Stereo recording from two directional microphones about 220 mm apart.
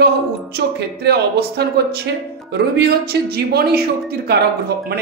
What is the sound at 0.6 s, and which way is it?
A man's voice, 50° right (ahead or behind).